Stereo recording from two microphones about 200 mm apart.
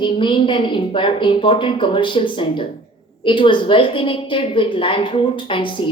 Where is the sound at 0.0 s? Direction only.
25° left (ahead or behind).